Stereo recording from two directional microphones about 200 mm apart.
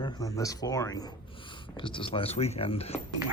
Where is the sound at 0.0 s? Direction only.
15° left (ahead or behind).